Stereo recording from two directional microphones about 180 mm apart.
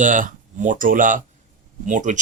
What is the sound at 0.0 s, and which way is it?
Speech, 45° right (ahead or behind).